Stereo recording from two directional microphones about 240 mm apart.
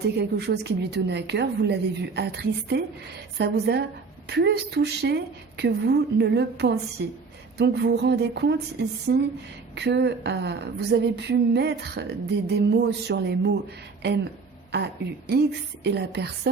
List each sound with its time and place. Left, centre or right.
0.2 s a woman's voice: right
15.3 s a woman's voice: right